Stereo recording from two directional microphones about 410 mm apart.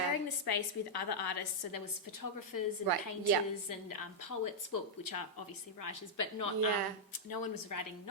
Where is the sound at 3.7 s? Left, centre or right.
Left.